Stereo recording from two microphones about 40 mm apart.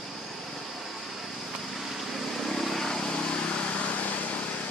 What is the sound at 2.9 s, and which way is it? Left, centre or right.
Vehicle, left.